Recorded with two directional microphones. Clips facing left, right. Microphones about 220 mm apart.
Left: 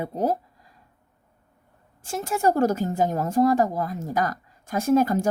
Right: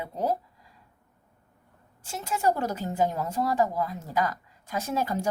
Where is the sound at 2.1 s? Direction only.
45° left (ahead or behind).